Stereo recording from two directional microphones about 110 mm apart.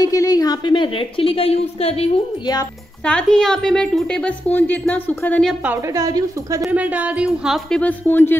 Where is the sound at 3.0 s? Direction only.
10° left (ahead or behind).